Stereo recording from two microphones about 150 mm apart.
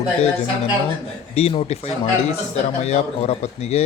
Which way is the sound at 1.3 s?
45° left (ahead or behind).